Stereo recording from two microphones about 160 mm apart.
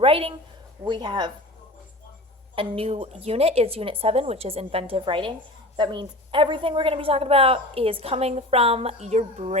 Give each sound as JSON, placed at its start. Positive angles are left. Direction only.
{"t": 0.0, "sound": "a woman's voice", "side_deg": -35}
{"t": 2.6, "sound": "a woman's voice", "side_deg": -35}